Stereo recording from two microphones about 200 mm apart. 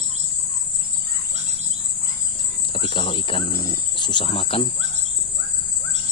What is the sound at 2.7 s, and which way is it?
Cricket, 25° left (ahead or behind).